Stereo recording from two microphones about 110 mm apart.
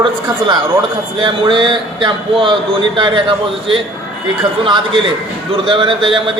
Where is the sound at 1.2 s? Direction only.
45° right (ahead or behind).